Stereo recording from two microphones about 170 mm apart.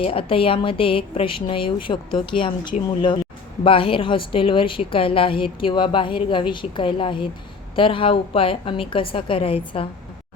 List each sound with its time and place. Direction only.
0.0 s a woman's voice: 35° left (ahead or behind)